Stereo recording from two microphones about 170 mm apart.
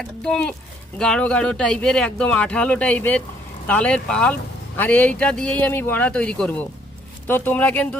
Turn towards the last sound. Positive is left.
turn(degrees=10)  # may be behind; listen again after turning